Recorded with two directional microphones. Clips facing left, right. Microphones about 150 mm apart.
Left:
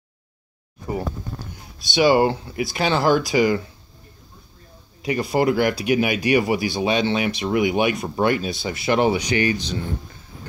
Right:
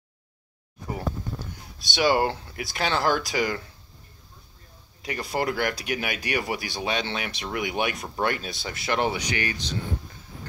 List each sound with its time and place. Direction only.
1.8 s speech: 5° left (ahead or behind)
5.0 s speech: 10° left (ahead or behind)
9.3 s speech: 25° left (ahead or behind)